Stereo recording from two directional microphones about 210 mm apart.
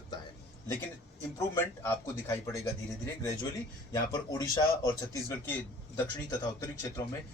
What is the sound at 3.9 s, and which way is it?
Speech, 15° left (ahead or behind).